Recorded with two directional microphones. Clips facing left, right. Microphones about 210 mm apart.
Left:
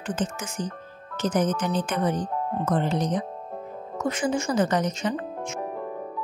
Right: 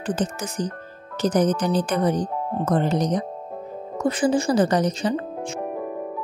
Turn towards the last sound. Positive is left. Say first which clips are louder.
# right 4 dB
turn(degrees=-35)  # may be behind; listen again after turning